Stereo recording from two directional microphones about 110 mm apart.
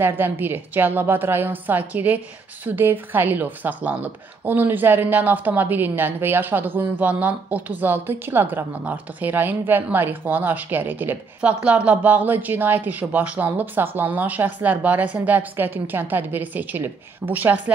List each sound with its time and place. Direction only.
0.2 s speech: 20° right (ahead or behind)